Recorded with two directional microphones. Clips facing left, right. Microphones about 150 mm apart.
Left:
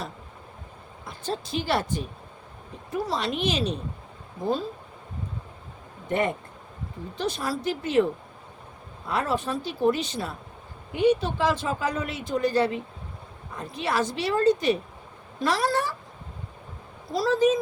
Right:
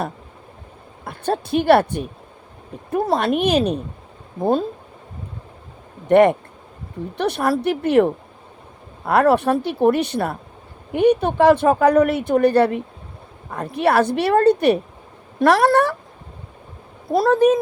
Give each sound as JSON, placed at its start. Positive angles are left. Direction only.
{"t": 1.0, "sound": "a woman's voice", "side_deg": -60}
{"t": 6.1, "sound": "a woman's voice", "side_deg": -70}
{"t": 17.1, "sound": "a woman's voice", "side_deg": -55}